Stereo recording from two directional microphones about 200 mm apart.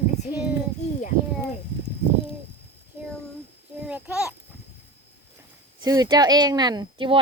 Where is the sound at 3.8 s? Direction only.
5° right (ahead or behind).